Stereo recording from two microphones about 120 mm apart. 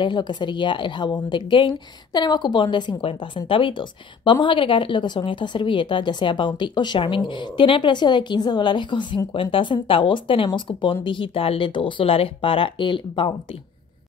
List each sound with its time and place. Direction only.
0.0 s speech: 40° left (ahead or behind)